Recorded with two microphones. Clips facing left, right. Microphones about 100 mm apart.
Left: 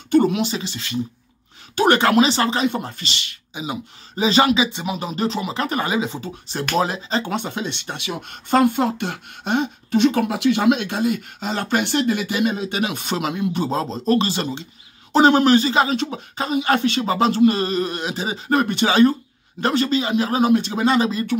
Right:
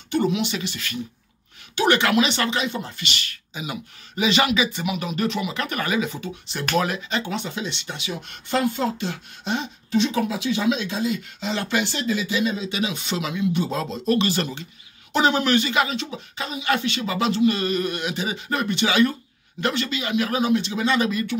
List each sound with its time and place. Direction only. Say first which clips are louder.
0.1 s speech: left 5 dB; 50° left (ahead or behind)
0.5 s speech: left 2 dB; 30° left (ahead or behind)
1.8 s a sound: left 4 dB; 40° left (ahead or behind)
3.0 s speech: even; 25° left (ahead or behind)
7.2 s speech: left 3 dB; 55° left (ahead or behind); by 14.3 s 35° left (ahead or behind)
14.3 s speech: left 1 dB; 25° left (ahead or behind)
15.1 s a sound: left 6 dB; 40° left (ahead or behind)
16.0 s a sound: left 6 dB; 45° left (ahead or behind)
20.4 s speech: left 4 dB; 45° left (ahead or behind)
21.0 s speech: left 2 dB; 30° left (ahead or behind)